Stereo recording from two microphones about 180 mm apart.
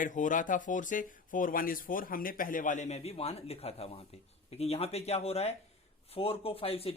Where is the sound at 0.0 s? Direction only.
45° left (ahead or behind).